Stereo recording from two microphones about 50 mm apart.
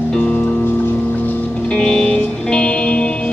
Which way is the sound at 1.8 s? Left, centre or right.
Centre.